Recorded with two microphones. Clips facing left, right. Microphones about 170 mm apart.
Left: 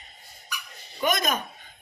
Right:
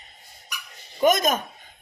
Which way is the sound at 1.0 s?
45° right (ahead or behind).